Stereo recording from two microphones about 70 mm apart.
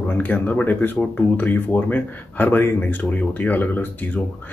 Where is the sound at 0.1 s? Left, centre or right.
Left.